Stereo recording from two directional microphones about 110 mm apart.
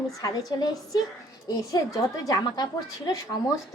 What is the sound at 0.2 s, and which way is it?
A woman's voice, 35° left (ahead or behind).